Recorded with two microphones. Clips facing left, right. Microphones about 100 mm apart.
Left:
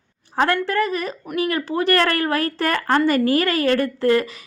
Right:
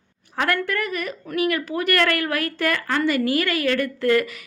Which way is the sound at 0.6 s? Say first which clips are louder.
Left 4 dB; 30° left (ahead or behind).